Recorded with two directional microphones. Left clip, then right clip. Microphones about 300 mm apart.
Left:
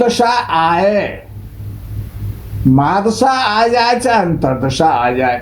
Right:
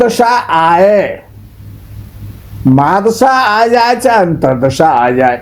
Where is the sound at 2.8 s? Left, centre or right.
Right.